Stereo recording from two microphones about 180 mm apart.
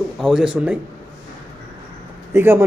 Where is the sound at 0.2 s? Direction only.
5° right (ahead or behind).